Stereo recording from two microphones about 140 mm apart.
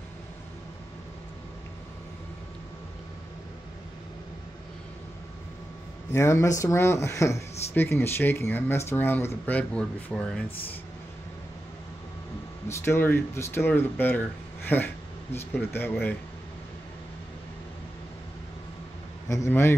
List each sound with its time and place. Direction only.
6.1 s speech: 20° left (ahead or behind)
12.6 s speech: 20° left (ahead or behind)
19.2 s a man's voice: 20° left (ahead or behind)